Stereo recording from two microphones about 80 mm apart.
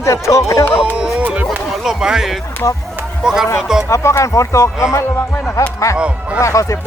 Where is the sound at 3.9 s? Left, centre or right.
Left.